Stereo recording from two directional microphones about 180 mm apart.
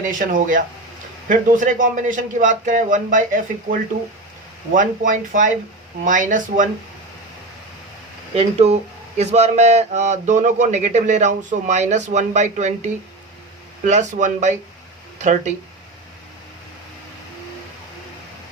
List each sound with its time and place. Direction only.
0.0 s speech: 45° right (ahead or behind)
8.4 s a man's voice: 35° right (ahead or behind)